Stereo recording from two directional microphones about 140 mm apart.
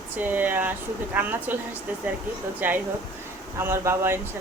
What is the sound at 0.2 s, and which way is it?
A woman's voice, 15° right (ahead or behind).